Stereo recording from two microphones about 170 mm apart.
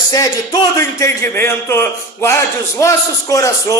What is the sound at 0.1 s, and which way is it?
A man's voice, 20° left (ahead or behind).